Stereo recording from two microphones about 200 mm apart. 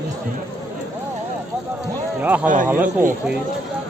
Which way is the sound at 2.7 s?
10° right (ahead or behind).